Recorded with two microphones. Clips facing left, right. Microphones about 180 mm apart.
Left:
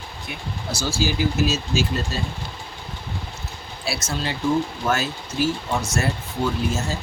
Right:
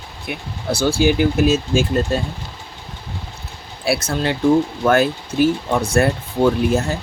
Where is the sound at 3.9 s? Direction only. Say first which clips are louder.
Right 8 dB; 60° right (ahead or behind).